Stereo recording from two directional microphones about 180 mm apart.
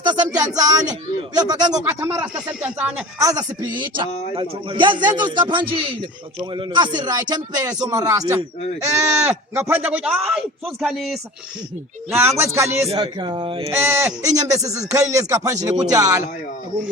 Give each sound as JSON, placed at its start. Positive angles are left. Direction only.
{"t": 0.0, "sound": "a sound", "side_deg": -25}
{"t": 0.3, "sound": "speech", "side_deg": -20}
{"t": 1.8, "sound": "speech", "side_deg": -10}
{"t": 3.2, "sound": "speech", "side_deg": -20}
{"t": 9.2, "sound": "speech", "side_deg": -10}
{"t": 12.1, "sound": "speech", "side_deg": -10}
{"t": 13.7, "sound": "speech", "side_deg": -15}